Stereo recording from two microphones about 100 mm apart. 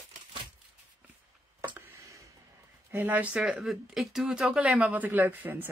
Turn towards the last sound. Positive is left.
turn(degrees=-20)  # may be behind; listen again after turning